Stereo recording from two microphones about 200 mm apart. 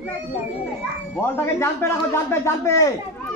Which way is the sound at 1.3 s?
15° left (ahead or behind).